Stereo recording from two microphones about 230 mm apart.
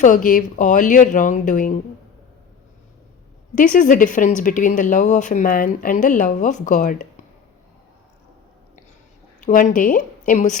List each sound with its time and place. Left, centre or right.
0.0 s speech: left
3.5 s speech: left
9.4 s speech: left